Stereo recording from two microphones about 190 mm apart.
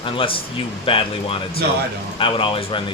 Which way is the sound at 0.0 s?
30° left (ahead or behind).